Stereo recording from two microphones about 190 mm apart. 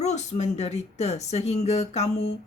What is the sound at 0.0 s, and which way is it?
A woman's voice, 35° left (ahead or behind).